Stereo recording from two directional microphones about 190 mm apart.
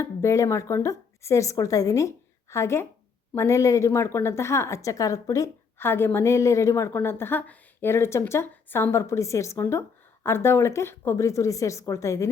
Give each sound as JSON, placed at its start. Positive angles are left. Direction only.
{"t": 0.0, "sound": "a woman's voice", "side_deg": 15}